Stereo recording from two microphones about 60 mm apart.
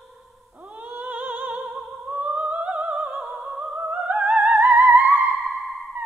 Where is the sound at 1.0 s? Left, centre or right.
Right.